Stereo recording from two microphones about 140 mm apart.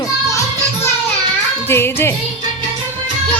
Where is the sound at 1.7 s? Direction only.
15° left (ahead or behind).